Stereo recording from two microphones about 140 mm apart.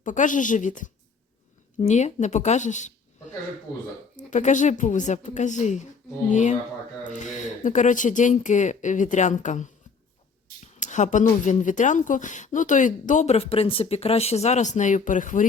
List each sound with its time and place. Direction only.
0.0 s speech: 65° left (ahead or behind)
1.8 s speech: 55° left (ahead or behind)
4.3 s speech: 60° left (ahead or behind)
10.8 s speech: 60° left (ahead or behind)